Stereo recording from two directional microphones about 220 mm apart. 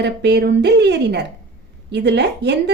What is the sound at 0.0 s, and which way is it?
A woman's voice, 50° right (ahead or behind).